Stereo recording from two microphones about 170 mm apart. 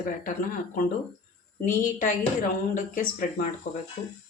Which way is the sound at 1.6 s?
50° left (ahead or behind).